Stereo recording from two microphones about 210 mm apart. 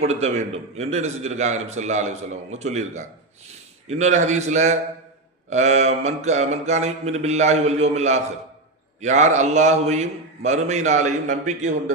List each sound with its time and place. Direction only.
0.1 s a man's voice: 30° right (ahead or behind)